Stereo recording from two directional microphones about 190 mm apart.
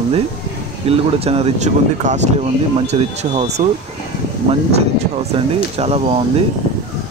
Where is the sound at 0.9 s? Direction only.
30° right (ahead or behind).